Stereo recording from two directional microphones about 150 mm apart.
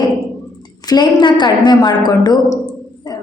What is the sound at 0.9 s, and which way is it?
A woman's voice, 30° left (ahead or behind).